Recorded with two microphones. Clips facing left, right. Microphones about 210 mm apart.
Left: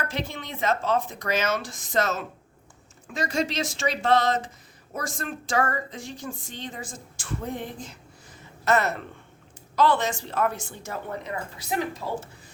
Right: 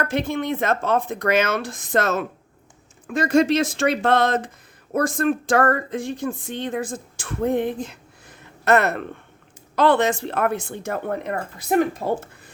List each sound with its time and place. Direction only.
0.0 s speech: 55° right (ahead or behind)